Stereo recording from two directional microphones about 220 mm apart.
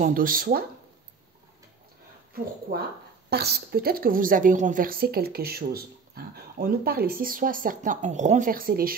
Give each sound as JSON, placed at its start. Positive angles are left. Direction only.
{"t": 0.0, "sound": "a woman's voice", "side_deg": -40}
{"t": 2.3, "sound": "a woman's voice", "side_deg": -40}